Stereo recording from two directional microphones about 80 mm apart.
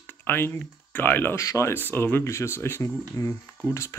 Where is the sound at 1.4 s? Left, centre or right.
Left.